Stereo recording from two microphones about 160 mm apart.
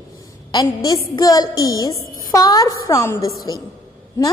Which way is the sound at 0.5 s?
25° left (ahead or behind).